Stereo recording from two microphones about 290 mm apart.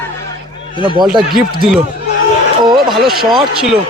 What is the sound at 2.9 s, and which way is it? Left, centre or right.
Speech, centre.